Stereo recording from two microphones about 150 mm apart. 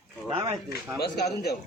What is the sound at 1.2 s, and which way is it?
Speech, 90° left.